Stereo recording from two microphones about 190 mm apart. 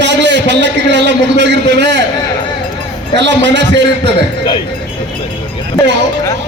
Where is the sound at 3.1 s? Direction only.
70° right (ahead or behind).